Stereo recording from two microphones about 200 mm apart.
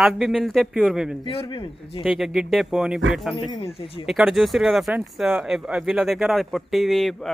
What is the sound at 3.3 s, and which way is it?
Speech, 25° left (ahead or behind).